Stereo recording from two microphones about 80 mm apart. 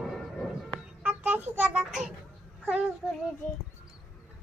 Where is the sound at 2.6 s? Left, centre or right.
Centre.